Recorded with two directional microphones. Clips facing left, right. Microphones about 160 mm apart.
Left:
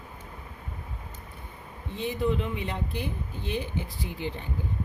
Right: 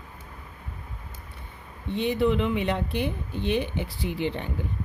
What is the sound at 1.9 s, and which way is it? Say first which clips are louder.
Speech: right 5 dB; 75° right (ahead or behind).